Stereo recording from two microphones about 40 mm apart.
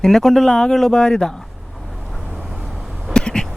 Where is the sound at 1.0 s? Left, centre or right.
Centre.